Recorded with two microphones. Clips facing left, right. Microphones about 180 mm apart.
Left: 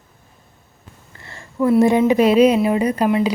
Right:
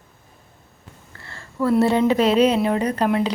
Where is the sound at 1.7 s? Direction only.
10° left (ahead or behind).